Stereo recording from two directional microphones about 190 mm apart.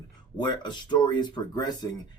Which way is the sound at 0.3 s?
25° left (ahead or behind).